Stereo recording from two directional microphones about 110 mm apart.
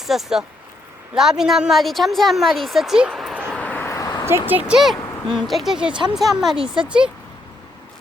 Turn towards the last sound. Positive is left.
turn(degrees=-10)  # may be behind; listen again after turning